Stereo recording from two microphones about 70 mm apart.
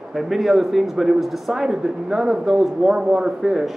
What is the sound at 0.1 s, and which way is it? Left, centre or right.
A man's voice, centre.